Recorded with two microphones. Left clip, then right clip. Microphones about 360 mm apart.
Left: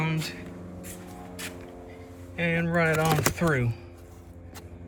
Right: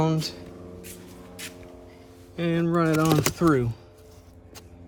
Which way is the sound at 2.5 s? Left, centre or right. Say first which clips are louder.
Right 2 dB; centre.